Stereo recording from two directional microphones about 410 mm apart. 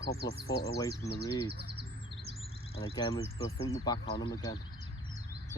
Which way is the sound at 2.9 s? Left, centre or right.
Centre.